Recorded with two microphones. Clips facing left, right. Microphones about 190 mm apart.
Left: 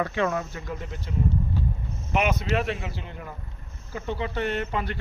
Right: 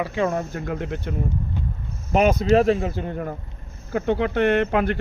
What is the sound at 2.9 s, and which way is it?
Speech, 50° right (ahead or behind).